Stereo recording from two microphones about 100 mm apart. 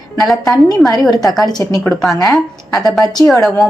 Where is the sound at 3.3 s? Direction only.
Centre (ahead or behind).